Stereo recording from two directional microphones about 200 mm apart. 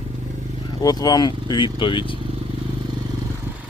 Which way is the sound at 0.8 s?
20° left (ahead or behind).